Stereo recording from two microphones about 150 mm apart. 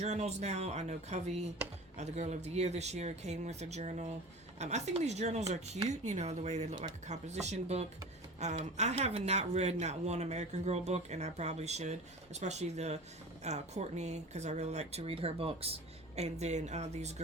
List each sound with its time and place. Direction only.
0.0 s speech: 50° right (ahead or behind)